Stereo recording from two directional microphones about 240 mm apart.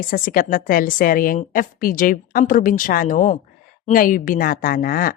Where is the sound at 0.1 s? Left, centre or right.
Left.